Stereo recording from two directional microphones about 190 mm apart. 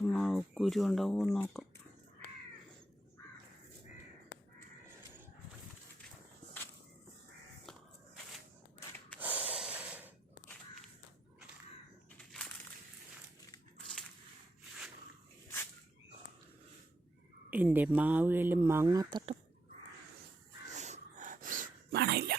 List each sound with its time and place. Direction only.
0.0 s speech: 5° left (ahead or behind)
9.1 s snort: 10° right (ahead or behind)
12.1 s crushing: 5° left (ahead or behind)
17.5 s speech: 10° right (ahead or behind)
20.7 s dog: 35° right (ahead or behind)
21.9 s whispering: 60° right (ahead or behind)